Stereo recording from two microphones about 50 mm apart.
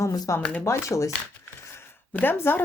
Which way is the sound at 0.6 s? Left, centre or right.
Left.